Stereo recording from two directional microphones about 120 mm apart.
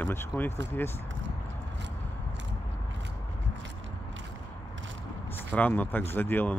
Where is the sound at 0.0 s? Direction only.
15° left (ahead or behind).